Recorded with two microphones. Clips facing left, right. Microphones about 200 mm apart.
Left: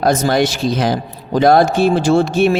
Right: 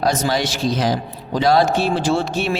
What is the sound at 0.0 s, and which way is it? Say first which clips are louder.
A man's voice: left 5 dB; 55° left (ahead or behind).